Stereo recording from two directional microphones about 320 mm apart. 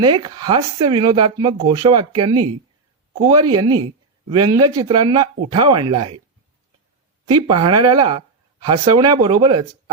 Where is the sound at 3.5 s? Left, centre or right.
Centre.